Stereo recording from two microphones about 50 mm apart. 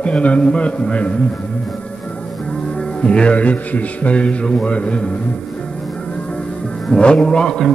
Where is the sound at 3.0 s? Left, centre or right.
Left.